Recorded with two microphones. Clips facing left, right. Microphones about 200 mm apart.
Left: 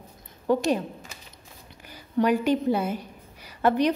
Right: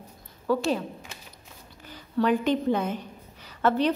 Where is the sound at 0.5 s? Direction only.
15° left (ahead or behind).